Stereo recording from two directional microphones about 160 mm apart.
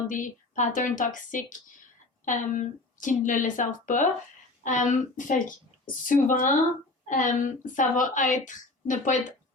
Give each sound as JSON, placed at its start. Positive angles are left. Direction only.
{"t": 0.1, "sound": "a woman's voice", "side_deg": 50}